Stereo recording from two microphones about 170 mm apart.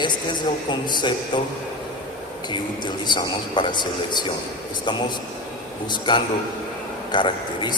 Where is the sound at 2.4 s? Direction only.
25° left (ahead or behind).